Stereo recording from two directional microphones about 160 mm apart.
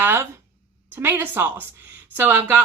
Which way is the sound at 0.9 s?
15° right (ahead or behind).